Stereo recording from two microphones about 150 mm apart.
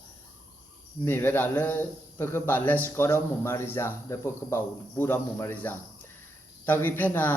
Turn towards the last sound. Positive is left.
turn(degrees=10)  # may be behind; listen again after turning